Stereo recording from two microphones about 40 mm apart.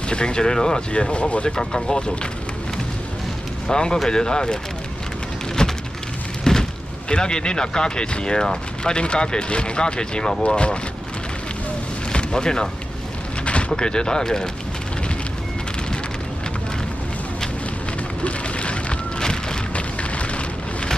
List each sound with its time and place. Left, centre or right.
0.1 s speech: left
1.6 s speech: centre
3.6 s speech: centre
5.6 s rain on surface: centre
6.5 s a sound: centre
7.1 s speech: left
12.1 s music: left
13.7 s speech: left
18.2 s a sound: left